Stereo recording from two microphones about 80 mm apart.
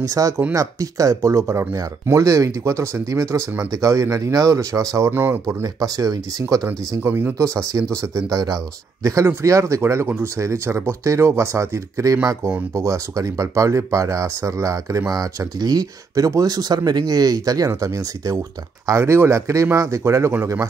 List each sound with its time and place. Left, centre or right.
0.0 s speech: right
5.1 s speech: right
5.6 s speech: right
7.0 s speech: right
18.9 s speech: right